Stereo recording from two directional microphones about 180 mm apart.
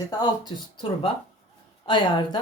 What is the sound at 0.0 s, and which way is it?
Speech, 20° left (ahead or behind).